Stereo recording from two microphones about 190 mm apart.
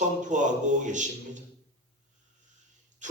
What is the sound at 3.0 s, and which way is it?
Wheeze, 40° right (ahead or behind).